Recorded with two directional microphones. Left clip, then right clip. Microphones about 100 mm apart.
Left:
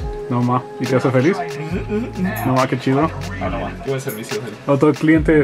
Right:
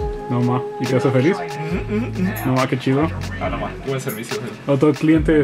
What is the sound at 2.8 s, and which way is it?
Speech, 15° left (ahead or behind).